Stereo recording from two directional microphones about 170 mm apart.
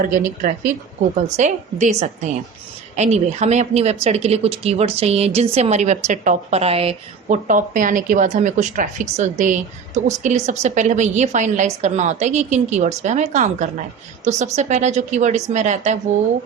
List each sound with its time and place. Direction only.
0.0 s a woman's voice: 50° right (ahead or behind); by 7.3 s 35° right (ahead or behind)
7.4 s a woman's voice: 50° right (ahead or behind)